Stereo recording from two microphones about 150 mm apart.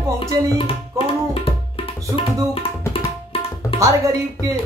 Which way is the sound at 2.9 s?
40° left (ahead or behind).